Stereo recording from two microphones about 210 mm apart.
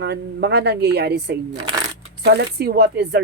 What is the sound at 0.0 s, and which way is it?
Speech, 50° right (ahead or behind).